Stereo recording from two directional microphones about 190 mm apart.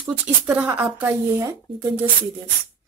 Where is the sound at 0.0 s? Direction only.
10° right (ahead or behind).